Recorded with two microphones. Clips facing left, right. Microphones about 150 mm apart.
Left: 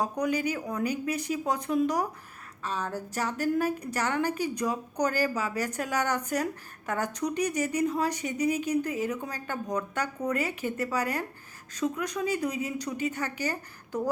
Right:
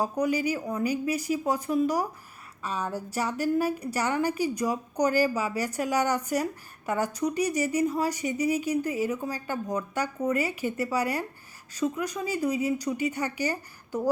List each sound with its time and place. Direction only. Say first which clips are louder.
0.0 s a woman's voice: right 2 dB; 10° right (ahead or behind)